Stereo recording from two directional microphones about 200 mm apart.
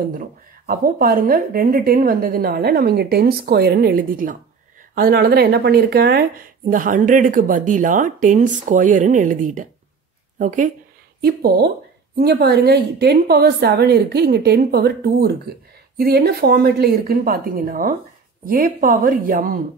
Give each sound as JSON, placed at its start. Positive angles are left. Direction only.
{"t": 0.1, "sound": "a woman's voice", "side_deg": -45}
{"t": 11.1, "sound": "a woman's voice", "side_deg": -50}